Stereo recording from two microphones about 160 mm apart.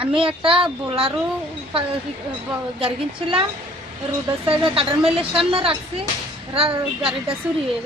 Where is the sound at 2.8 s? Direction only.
35° right (ahead or behind).